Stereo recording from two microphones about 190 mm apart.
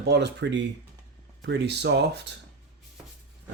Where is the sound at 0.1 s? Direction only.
65° right (ahead or behind).